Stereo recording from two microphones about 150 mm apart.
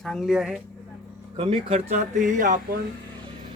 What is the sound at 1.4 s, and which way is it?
Speech, 40° right (ahead or behind).